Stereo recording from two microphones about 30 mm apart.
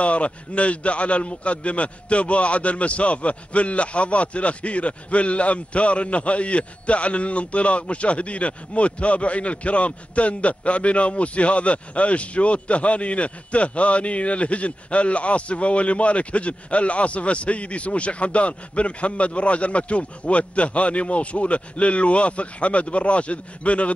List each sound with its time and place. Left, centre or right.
0.0 s a man's voice: left